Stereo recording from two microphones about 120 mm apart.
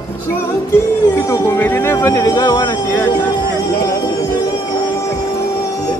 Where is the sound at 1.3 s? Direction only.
20° left (ahead or behind); by 2.8 s 35° left (ahead or behind).